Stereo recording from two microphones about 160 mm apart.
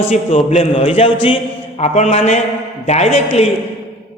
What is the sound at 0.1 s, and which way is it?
A man's voice, 45° left (ahead or behind).